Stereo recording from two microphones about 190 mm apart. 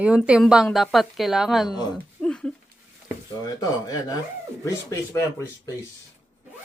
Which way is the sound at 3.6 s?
20° left (ahead or behind).